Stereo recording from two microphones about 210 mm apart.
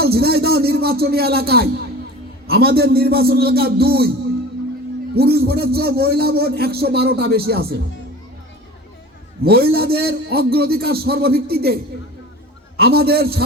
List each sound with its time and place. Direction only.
0.0 s a man's voice: 50° right (ahead or behind)
5.1 s a man's voice: 50° right (ahead or behind)
9.4 s a man's voice: 45° right (ahead or behind)